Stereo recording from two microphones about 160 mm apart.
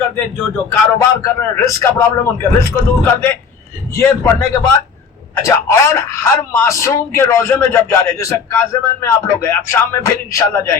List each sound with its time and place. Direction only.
0.7 s speech: 20° left (ahead or behind)